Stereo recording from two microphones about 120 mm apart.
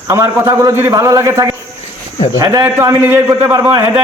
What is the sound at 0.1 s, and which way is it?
A man's voice, 25° right (ahead or behind).